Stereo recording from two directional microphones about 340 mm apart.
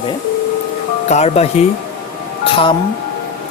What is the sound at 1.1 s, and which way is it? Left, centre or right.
Speech, centre.